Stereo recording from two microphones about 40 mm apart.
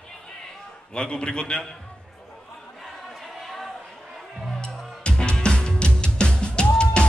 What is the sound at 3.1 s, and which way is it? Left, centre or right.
Choir, centre.